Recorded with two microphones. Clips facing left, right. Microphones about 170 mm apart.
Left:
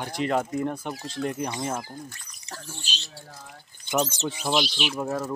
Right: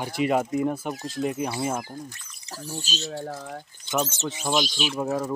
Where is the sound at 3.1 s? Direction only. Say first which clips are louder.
Right 12 dB; 80° right.